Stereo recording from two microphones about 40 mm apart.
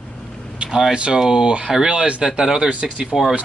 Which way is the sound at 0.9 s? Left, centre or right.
Right.